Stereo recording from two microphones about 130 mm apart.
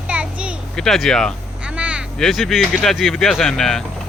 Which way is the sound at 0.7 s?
5° left (ahead or behind).